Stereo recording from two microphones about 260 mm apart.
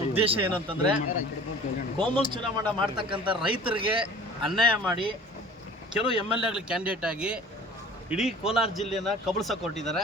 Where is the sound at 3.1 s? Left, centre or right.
Centre.